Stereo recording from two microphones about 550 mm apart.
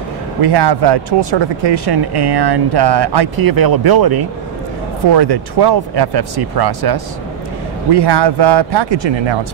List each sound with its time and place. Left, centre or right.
0.4 s speech: right